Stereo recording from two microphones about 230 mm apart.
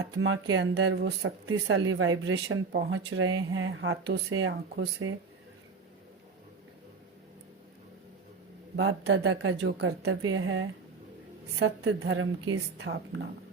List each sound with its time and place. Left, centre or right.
0.2 s speech: right
8.7 s speech: right